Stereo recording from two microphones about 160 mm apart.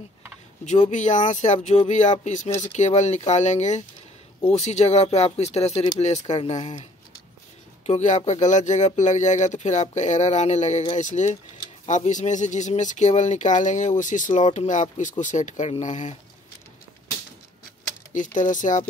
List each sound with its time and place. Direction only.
0.7 s speech: 45° left (ahead or behind)
18.1 s speech: 55° left (ahead or behind)